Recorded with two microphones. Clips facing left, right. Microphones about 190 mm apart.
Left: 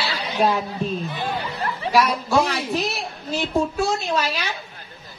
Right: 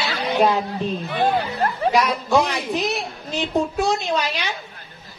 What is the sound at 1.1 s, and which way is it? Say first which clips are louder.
Speech: right 7 dB; 55° right (ahead or behind).